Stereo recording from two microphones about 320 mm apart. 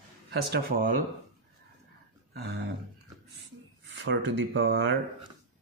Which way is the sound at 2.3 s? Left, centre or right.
Right.